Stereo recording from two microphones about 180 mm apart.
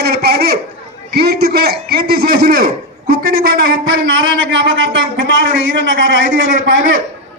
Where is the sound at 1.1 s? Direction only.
60° right (ahead or behind).